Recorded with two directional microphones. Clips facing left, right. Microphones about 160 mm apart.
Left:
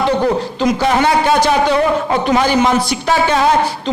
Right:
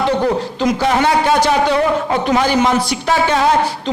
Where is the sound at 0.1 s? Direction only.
30° left (ahead or behind).